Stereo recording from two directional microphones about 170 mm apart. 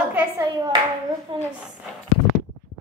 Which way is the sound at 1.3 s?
30° right (ahead or behind).